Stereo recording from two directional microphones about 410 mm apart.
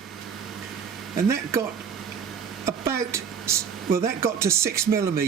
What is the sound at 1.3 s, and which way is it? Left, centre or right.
Speech, centre.